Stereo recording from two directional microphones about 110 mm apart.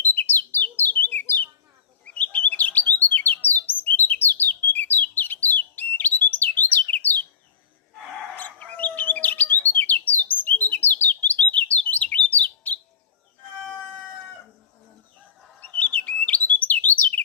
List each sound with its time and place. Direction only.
0.0 s bird: 20° left (ahead or behind)
8.4 s bird: 15° left (ahead or behind)
12.3 s chirp: 15° left (ahead or behind)
15.6 s bird: 15° left (ahead or behind)